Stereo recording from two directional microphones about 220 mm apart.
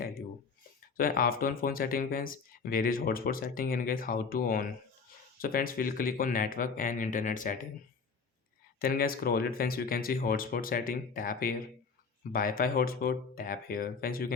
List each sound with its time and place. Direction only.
0.9 s speech: 40° left (ahead or behind)
8.8 s speech: 40° left (ahead or behind)